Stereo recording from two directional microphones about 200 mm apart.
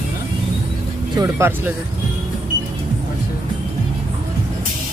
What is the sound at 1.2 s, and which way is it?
Speech, 10° right (ahead or behind).